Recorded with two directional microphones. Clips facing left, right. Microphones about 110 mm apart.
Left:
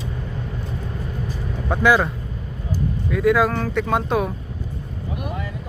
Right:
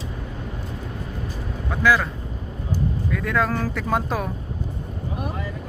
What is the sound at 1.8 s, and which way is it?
Speech, 20° left (ahead or behind).